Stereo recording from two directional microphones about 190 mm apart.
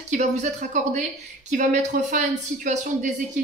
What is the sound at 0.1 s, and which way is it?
Speech, 40° right (ahead or behind).